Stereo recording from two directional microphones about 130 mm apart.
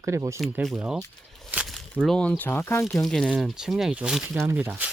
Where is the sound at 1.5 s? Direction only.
15° right (ahead or behind).